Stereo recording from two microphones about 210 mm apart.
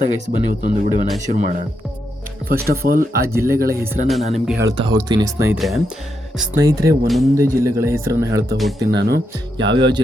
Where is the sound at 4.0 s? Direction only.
35° right (ahead or behind).